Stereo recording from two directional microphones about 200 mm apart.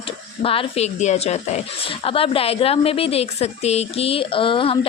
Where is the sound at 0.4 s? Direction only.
25° left (ahead or behind).